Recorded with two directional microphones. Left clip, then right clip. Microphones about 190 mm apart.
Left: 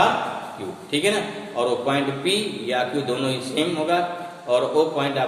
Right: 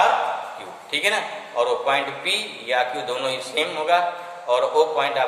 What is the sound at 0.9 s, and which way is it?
A man's voice, 10° left (ahead or behind).